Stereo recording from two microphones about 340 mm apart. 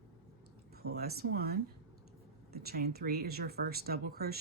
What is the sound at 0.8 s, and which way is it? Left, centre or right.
Speech, right.